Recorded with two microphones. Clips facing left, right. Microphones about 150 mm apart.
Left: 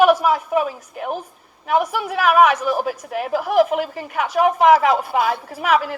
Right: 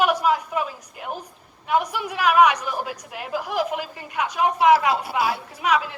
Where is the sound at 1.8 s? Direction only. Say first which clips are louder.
Left 4 dB; 45° left (ahead or behind).